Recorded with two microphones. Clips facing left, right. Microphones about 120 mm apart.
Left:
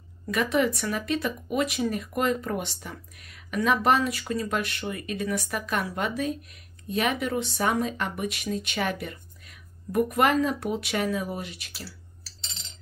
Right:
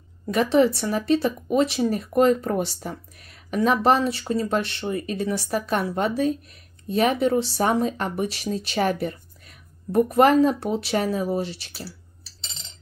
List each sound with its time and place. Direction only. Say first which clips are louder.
0.3 s speech: right 6 dB; 30° right (ahead or behind)